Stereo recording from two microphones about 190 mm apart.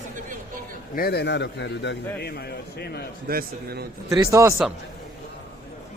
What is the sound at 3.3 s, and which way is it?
Speech, 55° right (ahead or behind).